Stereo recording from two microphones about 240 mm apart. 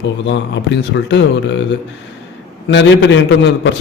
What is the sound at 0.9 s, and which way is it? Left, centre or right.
Speech, left.